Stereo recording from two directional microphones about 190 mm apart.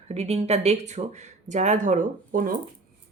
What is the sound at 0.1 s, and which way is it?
Speech, 35° right (ahead or behind).